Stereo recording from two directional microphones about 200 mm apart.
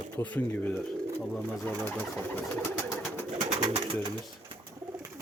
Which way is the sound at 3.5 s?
20° right (ahead or behind).